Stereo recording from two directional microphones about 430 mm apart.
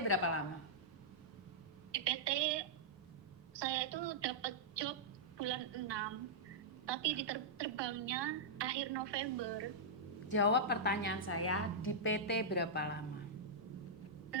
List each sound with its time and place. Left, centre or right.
0.1 s speech: left
1.9 s a sound: right
6.8 s a woman's voice: right
10.2 s a woman's voice: left